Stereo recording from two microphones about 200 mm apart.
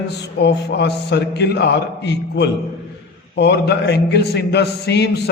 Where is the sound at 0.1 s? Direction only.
55° left (ahead or behind).